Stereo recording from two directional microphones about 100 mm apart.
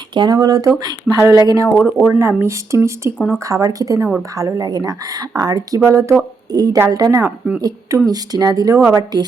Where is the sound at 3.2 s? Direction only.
5° left (ahead or behind).